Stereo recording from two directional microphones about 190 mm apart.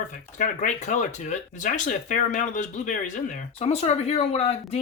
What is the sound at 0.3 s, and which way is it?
Speech, 40° left (ahead or behind).